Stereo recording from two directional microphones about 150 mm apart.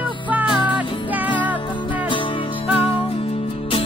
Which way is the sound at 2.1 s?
35° left (ahead or behind).